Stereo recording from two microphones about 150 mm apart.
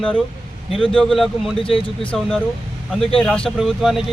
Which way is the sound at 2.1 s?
5° left (ahead or behind).